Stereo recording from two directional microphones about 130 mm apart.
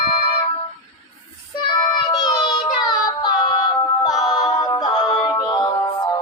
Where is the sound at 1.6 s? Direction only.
35° left (ahead or behind).